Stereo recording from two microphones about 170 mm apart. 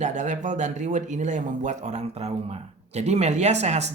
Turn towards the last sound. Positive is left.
turn(degrees=-40)  # may be behind; listen again after turning